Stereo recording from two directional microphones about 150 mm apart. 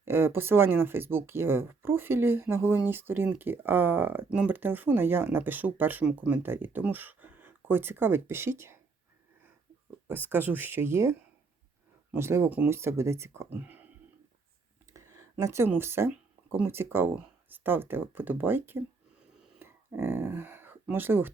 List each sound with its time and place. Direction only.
0.0 s speech: 15° right (ahead or behind)
10.1 s speech: 15° right (ahead or behind)
12.1 s speech: 15° right (ahead or behind)
14.9 s speech: 20° right (ahead or behind)
19.5 s a sound: 15° right (ahead or behind)